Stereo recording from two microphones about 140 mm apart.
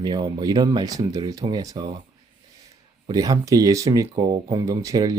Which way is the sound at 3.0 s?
25° right (ahead or behind).